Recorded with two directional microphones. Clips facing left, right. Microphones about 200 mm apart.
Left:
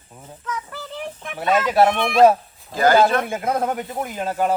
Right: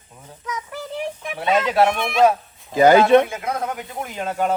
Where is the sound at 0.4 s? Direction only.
15° right (ahead or behind).